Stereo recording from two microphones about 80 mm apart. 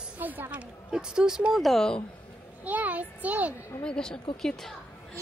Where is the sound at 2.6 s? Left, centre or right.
Right.